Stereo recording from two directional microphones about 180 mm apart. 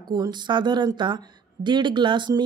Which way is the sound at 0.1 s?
25° right (ahead or behind).